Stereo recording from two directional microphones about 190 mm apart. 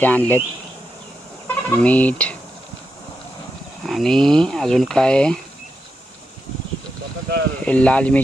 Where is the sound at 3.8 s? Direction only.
Centre (ahead or behind).